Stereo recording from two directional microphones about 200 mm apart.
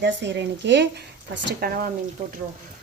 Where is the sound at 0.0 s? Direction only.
60° right (ahead or behind).